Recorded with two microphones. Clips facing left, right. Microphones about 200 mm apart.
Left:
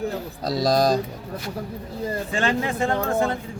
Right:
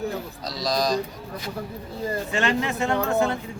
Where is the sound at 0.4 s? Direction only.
50° left (ahead or behind).